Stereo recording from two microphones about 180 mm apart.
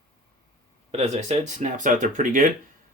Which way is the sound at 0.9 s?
40° right (ahead or behind).